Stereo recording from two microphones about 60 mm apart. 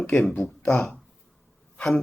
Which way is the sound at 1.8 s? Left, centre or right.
Centre.